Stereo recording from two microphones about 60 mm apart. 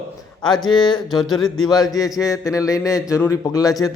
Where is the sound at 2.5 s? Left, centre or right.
Left.